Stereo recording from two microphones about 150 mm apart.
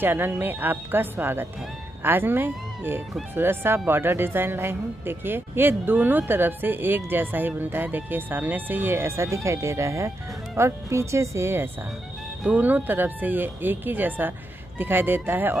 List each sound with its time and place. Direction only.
0.0 s speech: 15° right (ahead or behind)